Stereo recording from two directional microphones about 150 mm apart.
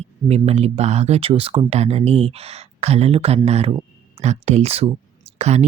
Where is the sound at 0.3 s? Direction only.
45° right (ahead or behind).